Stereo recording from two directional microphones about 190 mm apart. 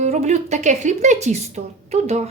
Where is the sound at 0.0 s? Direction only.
35° right (ahead or behind).